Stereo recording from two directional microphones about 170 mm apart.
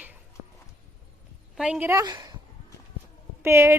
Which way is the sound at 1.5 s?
5° right (ahead or behind).